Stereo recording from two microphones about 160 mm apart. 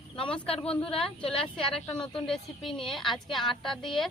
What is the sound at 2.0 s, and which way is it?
Speech, 5° left (ahead or behind).